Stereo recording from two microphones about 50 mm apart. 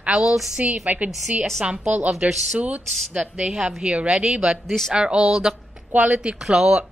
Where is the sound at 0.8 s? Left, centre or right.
Right.